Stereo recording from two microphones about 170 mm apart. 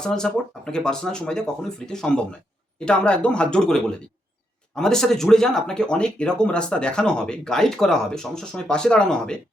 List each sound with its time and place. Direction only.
0.0 s speech: 5° left (ahead or behind)